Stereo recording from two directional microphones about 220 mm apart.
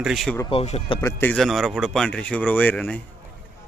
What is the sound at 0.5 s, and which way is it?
Speech, 30° left (ahead or behind).